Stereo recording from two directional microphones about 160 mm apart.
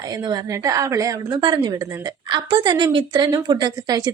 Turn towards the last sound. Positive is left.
turn(degrees=-25)  # may be behind; listen again after turning